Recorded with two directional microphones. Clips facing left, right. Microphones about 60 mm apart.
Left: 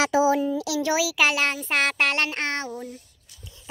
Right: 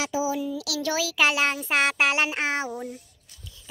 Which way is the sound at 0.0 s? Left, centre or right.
Left.